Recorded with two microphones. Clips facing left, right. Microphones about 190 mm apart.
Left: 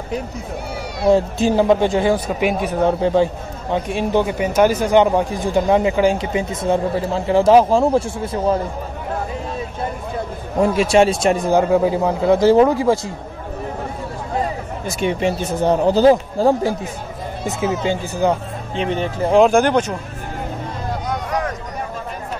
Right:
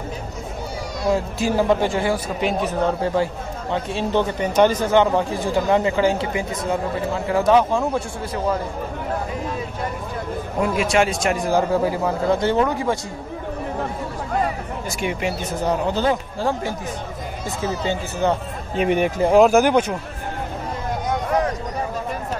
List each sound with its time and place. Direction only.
1.1 s speech: 20° left (ahead or behind)
10.6 s speech: 30° left (ahead or behind)
14.9 s speech: 25° left (ahead or behind)
17.8 s speech: 10° left (ahead or behind)
18.8 s speech: 15° right (ahead or behind)